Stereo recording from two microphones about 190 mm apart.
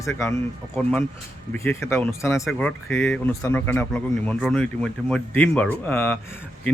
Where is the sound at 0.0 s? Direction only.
15° left (ahead or behind).